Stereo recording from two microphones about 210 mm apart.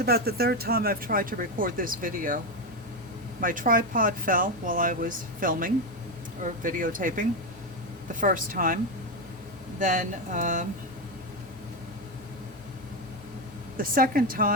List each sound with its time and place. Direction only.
0.0 s speech: 45° right (ahead or behind)
3.4 s speech: 40° right (ahead or behind)
9.8 s speech: 40° right (ahead or behind)
13.7 s a woman's voice: 40° right (ahead or behind)